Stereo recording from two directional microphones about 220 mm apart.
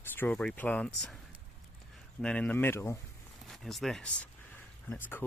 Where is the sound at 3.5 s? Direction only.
Centre (ahead or behind).